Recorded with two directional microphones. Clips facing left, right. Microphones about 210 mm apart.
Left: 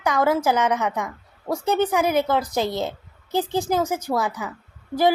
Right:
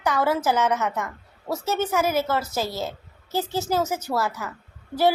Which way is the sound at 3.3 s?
15° left (ahead or behind).